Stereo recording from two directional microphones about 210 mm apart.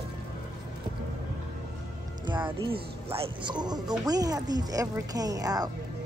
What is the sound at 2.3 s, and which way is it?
Music, 20° right (ahead or behind).